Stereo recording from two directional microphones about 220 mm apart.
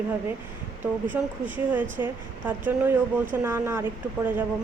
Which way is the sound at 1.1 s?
10° right (ahead or behind).